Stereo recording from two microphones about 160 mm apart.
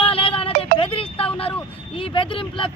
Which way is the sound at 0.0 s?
35° left (ahead or behind).